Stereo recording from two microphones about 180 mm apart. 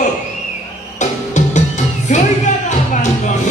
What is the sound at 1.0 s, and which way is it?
Music, 40° left (ahead or behind).